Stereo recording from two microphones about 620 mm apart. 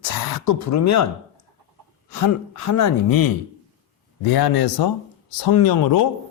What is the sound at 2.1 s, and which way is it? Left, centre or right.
A man's voice, left.